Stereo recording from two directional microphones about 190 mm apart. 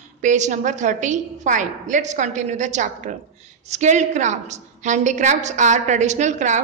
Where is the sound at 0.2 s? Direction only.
40° right (ahead or behind).